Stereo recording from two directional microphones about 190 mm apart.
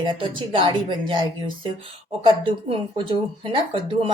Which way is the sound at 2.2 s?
25° right (ahead or behind).